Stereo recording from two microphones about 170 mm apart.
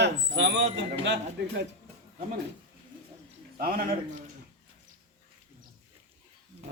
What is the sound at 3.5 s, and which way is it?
Speech, 55° right (ahead or behind).